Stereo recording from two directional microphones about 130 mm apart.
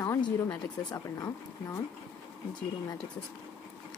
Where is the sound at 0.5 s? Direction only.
25° left (ahead or behind).